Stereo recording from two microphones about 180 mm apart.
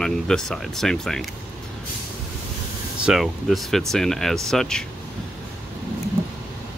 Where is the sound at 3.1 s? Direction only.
Centre (ahead or behind).